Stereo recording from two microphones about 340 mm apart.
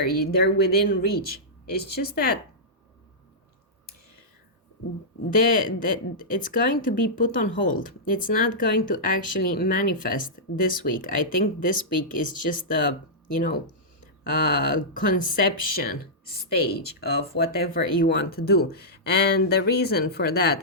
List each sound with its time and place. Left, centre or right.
0.3 s speech: left
5.3 s speech: left
17.0 s speech: left